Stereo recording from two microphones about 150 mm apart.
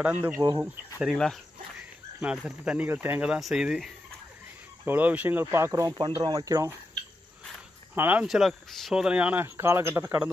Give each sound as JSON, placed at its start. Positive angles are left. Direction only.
{"t": 0.0, "sound": "speech", "side_deg": -10}
{"t": 7.9, "sound": "speech", "side_deg": -15}
{"t": 8.3, "sound": "speech", "side_deg": 0}